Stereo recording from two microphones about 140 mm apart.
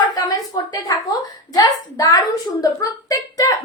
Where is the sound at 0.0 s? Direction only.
30° left (ahead or behind).